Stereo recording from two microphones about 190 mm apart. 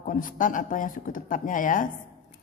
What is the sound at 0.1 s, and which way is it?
Speech, 45° left (ahead or behind).